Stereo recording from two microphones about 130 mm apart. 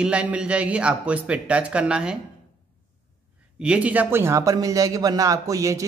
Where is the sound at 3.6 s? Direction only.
10° right (ahead or behind).